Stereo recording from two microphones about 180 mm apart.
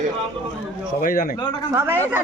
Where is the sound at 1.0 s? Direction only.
50° left (ahead or behind).